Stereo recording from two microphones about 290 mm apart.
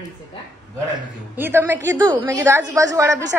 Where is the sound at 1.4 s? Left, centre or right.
Centre.